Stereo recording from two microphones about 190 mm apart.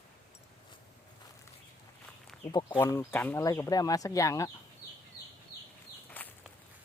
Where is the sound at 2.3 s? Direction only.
Centre (ahead or behind).